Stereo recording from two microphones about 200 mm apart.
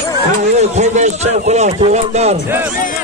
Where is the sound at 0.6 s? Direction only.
35° right (ahead or behind).